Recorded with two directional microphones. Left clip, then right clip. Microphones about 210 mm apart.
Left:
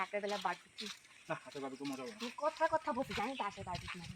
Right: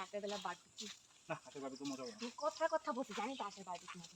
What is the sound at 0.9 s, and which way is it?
Speech, 50° left (ahead or behind).